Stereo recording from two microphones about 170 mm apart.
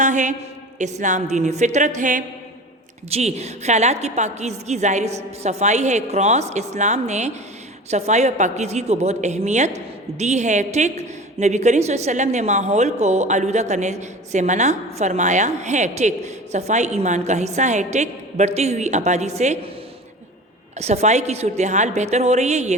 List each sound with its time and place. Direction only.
0.0 s a sound: 45° right (ahead or behind)
0.8 s a woman's voice: 45° right (ahead or behind)
20.7 s a woman's voice: 40° right (ahead or behind)